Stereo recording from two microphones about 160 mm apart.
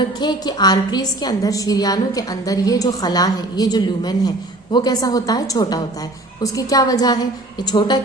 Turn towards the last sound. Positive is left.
turn(degrees=25)  # may be behind; listen again after turning